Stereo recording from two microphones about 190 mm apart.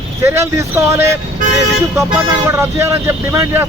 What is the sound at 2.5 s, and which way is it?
A man's voice, 15° right (ahead or behind).